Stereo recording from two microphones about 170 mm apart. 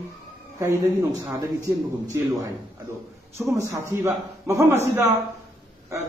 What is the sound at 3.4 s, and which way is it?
Speech, 15° right (ahead or behind).